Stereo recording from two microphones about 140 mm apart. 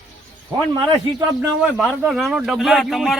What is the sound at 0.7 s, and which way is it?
Speech, 25° right (ahead or behind).